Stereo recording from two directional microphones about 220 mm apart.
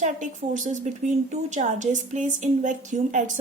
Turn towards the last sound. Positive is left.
turn(degrees=-35)  # may be behind; listen again after turning